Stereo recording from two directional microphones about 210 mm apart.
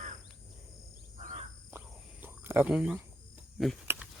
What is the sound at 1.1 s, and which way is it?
Insect, 35° right (ahead or behind).